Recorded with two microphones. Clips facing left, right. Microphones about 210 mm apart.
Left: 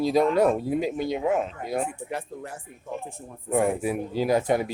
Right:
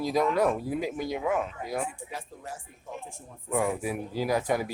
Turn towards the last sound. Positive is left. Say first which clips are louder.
# left 4 dB
turn(degrees=25)  # may be behind; listen again after turning